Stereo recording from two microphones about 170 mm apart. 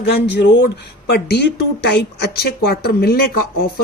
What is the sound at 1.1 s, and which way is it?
A woman's voice, 70° left (ahead or behind).